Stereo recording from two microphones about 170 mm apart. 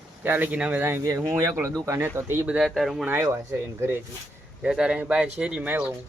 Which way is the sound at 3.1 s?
15° right (ahead or behind).